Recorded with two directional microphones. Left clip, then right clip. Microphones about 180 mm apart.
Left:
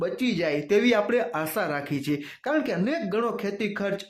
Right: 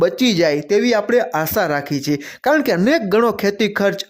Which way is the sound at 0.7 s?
25° right (ahead or behind).